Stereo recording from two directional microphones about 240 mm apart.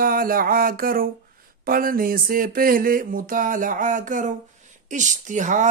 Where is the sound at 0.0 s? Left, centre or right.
Right.